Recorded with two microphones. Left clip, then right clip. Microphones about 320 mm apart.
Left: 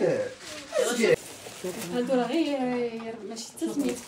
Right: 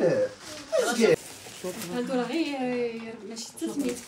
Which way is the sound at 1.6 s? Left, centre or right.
Centre.